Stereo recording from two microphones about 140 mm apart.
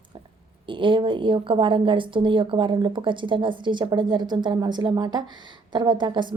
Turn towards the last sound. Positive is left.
turn(degrees=-35)  # may be behind; listen again after turning